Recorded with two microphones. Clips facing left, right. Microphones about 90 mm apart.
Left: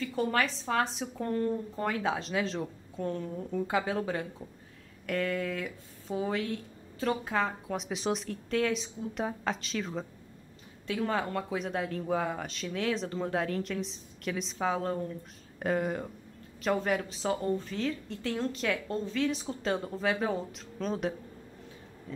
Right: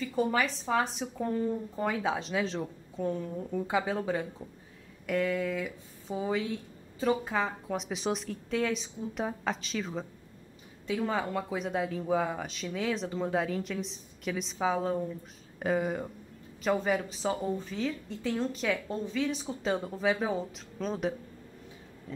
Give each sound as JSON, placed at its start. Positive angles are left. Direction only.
{"t": 0.0, "sound": "speech", "side_deg": -5}